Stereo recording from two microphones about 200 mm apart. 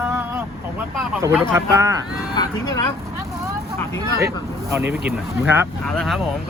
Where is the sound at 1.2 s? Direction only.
15° right (ahead or behind).